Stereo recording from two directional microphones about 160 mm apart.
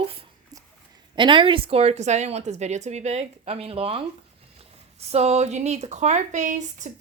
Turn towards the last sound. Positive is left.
turn(degrees=-50)  # may be behind; listen again after turning